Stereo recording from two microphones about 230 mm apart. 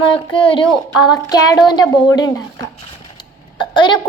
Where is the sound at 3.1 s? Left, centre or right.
Centre.